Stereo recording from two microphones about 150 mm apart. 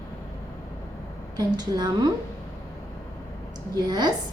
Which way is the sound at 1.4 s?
25° right (ahead or behind).